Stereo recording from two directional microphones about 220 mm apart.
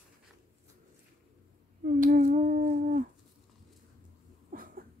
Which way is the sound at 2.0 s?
40° right (ahead or behind).